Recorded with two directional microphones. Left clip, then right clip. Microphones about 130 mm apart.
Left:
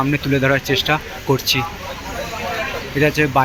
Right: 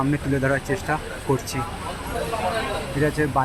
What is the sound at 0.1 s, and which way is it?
Speech, 25° left (ahead or behind).